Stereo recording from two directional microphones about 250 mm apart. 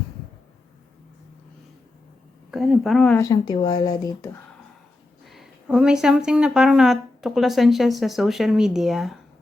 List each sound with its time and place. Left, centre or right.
2.5 s speech: centre
5.2 s speech: centre